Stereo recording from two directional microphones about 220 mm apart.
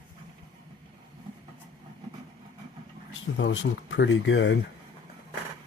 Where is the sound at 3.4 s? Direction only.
55° left (ahead or behind).